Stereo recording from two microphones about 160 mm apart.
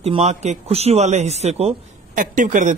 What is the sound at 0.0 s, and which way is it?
A man's voice, 40° right (ahead or behind).